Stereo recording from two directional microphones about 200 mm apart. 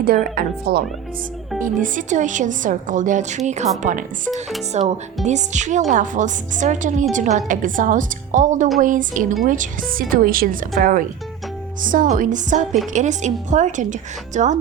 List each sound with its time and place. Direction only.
0.3 s a woman's voice: 50° right (ahead or behind)